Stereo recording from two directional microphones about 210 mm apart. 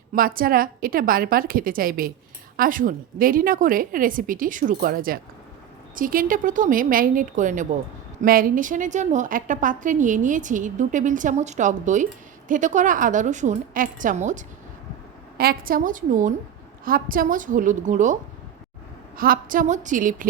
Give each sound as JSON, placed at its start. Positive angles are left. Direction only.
{"t": 0.1, "sound": "a woman's voice", "side_deg": -40}